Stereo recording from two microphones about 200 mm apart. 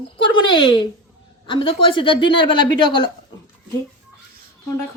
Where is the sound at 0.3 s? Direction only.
25° left (ahead or behind).